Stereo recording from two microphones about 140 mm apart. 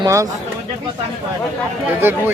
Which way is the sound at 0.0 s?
25° right (ahead or behind).